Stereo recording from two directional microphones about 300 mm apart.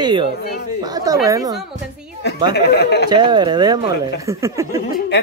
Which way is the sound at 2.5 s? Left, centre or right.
Left.